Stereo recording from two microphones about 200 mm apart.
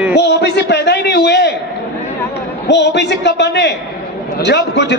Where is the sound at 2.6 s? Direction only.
60° left (ahead or behind).